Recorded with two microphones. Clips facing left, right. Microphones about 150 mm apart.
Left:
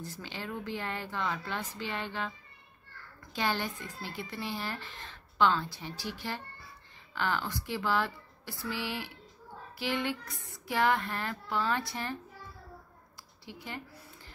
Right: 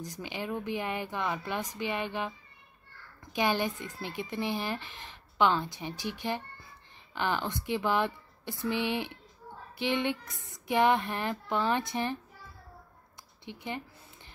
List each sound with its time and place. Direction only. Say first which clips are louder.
0.0 s speech: right 4 dB; 15° right (ahead or behind)
3.3 s speech: right 4 dB; 15° right (ahead or behind)
13.5 s speech: right 4 dB; 20° right (ahead or behind)